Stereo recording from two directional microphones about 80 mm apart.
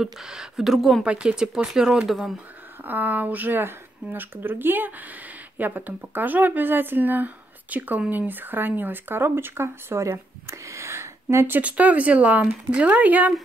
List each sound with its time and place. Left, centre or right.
0.0 s speech: centre
1.0 s speech: centre
2.8 s speech: right